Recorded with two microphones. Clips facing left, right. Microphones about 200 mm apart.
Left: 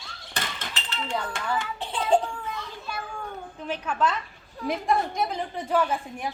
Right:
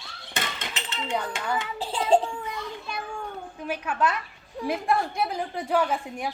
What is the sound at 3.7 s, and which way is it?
A woman's voice, 10° right (ahead or behind).